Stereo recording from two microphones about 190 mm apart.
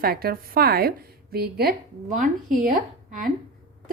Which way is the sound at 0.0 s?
50° right (ahead or behind).